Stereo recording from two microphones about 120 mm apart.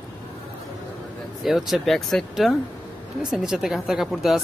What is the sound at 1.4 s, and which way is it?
Speech, centre (ahead or behind).